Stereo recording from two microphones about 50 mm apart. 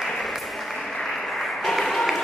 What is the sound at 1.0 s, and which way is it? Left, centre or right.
Applause, centre.